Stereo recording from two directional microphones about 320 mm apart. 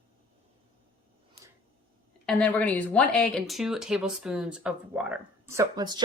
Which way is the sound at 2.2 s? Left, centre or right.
Centre.